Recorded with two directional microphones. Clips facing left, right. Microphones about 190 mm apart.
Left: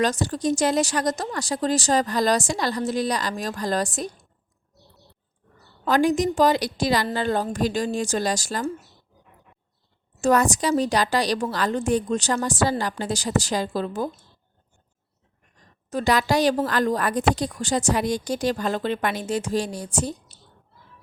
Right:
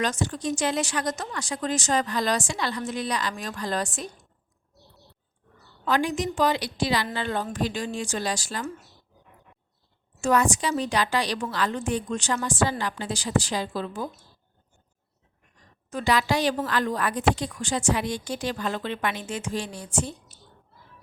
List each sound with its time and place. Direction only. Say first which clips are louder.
0.0 s a woman's voice: left 5 dB; 35° left (ahead or behind)
5.8 s a woman's voice: left 5 dB; 40° left (ahead or behind)
10.2 s a woman's voice: left 3 dB; 40° left (ahead or behind)
15.9 s a woman's voice: left 3 dB; 40° left (ahead or behind)